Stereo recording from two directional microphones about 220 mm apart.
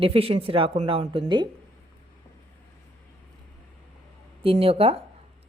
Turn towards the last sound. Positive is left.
turn(degrees=-25)  # may be behind; listen again after turning